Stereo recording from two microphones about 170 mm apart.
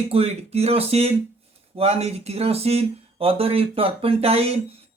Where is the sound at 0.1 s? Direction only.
35° right (ahead or behind).